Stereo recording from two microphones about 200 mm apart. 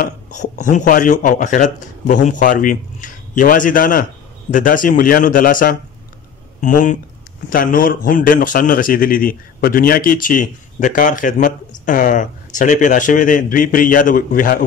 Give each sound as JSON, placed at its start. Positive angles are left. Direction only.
{"t": 0.0, "sound": "a man's voice", "side_deg": 40}